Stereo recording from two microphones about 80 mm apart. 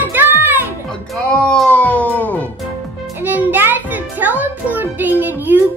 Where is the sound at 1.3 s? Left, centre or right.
Centre.